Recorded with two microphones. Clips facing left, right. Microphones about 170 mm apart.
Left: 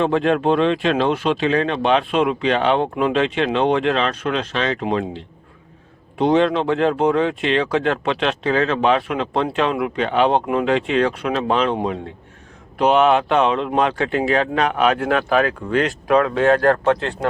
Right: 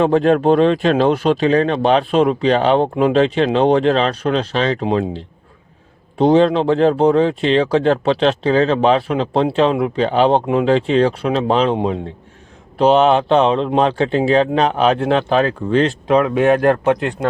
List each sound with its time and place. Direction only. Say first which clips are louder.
0.0 s speech: right 4 dB; 40° right (ahead or behind); by 17.2 s 15° right (ahead or behind)